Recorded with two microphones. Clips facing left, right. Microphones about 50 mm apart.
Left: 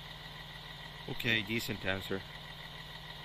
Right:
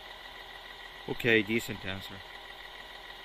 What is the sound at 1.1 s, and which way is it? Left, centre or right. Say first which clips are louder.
Speech: right 8 dB; right.